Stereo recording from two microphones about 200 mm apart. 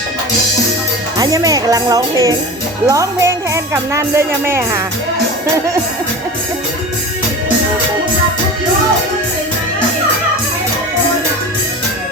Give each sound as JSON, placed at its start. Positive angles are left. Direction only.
{"t": 1.2, "sound": "a woman's voice", "side_deg": -20}